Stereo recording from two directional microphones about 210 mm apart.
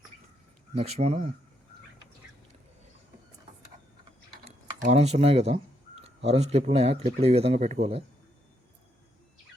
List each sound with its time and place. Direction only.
0.7 s speech: 30° right (ahead or behind)
4.8 s speech: 30° right (ahead or behind)